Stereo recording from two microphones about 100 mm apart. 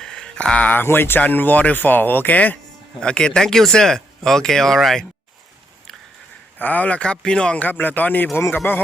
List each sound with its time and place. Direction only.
0.0 s speech: 5° left (ahead or behind)
6.6 s speech: 15° left (ahead or behind)